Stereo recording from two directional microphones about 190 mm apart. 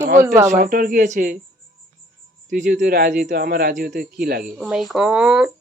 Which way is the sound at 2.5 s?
40° right (ahead or behind).